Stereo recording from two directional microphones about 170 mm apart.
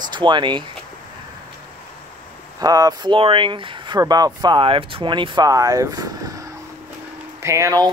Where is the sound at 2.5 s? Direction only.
20° right (ahead or behind).